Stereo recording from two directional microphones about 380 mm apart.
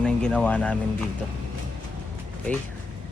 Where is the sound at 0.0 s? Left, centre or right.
Centre.